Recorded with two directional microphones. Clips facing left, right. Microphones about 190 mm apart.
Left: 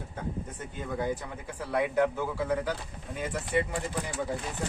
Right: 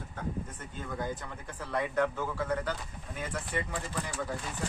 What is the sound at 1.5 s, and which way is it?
Speech, 10° left (ahead or behind).